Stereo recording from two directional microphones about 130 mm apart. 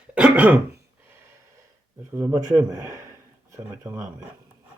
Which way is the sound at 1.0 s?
15° right (ahead or behind).